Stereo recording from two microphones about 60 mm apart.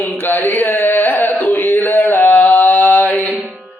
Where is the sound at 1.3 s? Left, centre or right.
Left.